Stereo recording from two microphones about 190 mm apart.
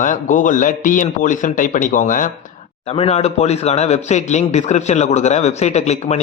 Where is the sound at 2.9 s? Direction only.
35° left (ahead or behind).